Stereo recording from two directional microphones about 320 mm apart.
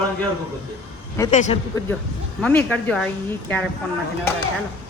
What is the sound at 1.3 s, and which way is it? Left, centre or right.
Speech, left.